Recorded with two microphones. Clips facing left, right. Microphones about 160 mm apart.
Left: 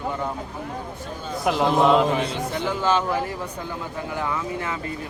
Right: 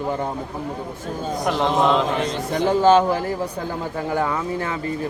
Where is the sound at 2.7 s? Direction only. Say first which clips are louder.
Right 8 dB; 35° right (ahead or behind).